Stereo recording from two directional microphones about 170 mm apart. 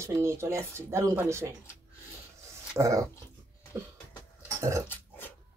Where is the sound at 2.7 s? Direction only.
20° right (ahead or behind).